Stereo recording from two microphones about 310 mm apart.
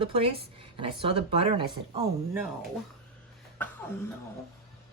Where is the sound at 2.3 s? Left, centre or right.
Centre.